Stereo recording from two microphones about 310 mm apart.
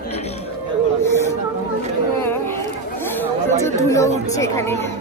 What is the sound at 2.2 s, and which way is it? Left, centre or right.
Chatter, centre.